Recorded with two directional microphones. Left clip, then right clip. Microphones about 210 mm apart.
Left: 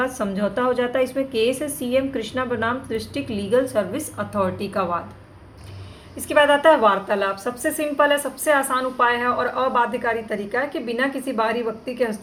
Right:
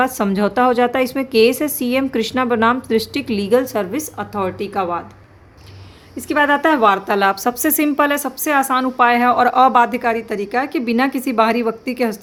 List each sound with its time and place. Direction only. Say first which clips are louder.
0.0 s a woman's voice: right 6 dB; 45° right (ahead or behind); by 5.0 s 30° right (ahead or behind)
6.1 s a woman's voice: right 1 dB; 30° right (ahead or behind); by 12.2 s 45° right (ahead or behind)